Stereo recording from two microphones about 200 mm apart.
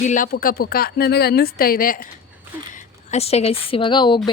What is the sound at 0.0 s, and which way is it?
Speech, 40° left (ahead or behind).